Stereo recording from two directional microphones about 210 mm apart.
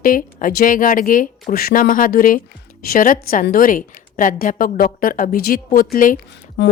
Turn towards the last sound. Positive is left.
turn(degrees=55)  # may be behind; listen again after turning